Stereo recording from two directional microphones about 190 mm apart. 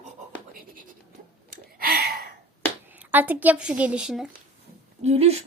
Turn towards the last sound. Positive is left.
turn(degrees=-35)  # may be behind; listen again after turning